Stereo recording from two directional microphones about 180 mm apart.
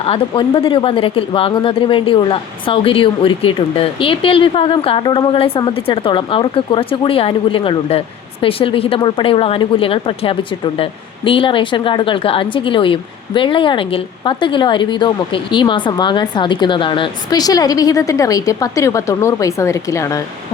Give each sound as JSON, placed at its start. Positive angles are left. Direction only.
{"t": 0.0, "sound": "speech", "side_deg": 30}